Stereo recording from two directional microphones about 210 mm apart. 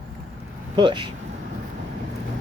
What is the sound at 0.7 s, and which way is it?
Speech, 20° right (ahead or behind).